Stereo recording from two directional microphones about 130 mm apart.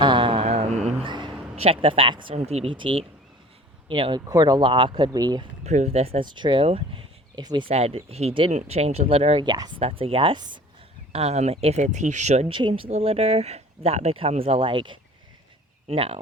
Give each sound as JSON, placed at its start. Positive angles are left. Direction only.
{"t": 0.0, "sound": "mantra", "side_deg": -40}
{"t": 1.0, "sound": "a sound", "side_deg": -35}
{"t": 2.3, "sound": "speech", "side_deg": -55}
{"t": 2.7, "sound": "speech", "side_deg": -40}
{"t": 5.6, "sound": "speech", "side_deg": -60}
{"t": 6.2, "sound": "speech", "side_deg": -35}
{"t": 7.7, "sound": "speech", "side_deg": -50}
{"t": 9.5, "sound": "speech", "side_deg": -35}
{"t": 9.8, "sound": "speech", "side_deg": -45}
{"t": 11.1, "sound": "speech", "side_deg": -55}
{"t": 12.5, "sound": "speech", "side_deg": -40}